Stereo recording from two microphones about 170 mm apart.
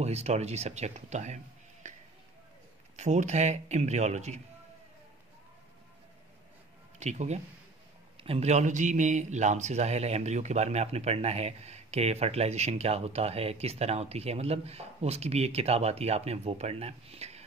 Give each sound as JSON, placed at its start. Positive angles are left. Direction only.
{"t": 0.0, "sound": "speech", "side_deg": -40}
{"t": 3.0, "sound": "speech", "side_deg": -45}
{"t": 7.0, "sound": "a man's voice", "side_deg": -40}